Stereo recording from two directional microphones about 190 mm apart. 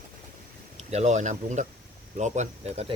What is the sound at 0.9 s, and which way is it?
Speech, 40° right (ahead or behind).